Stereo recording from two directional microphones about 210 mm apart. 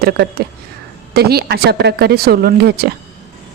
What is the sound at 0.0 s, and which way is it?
Speech, 50° right (ahead or behind).